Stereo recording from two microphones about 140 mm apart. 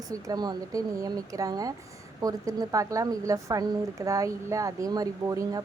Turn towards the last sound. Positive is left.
turn(degrees=-25)  # may be behind; listen again after turning